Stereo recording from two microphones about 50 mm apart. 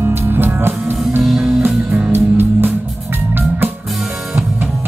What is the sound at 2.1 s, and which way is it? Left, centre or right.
Music, right.